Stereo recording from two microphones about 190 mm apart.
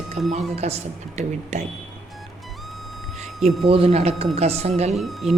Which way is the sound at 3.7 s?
30° right (ahead or behind).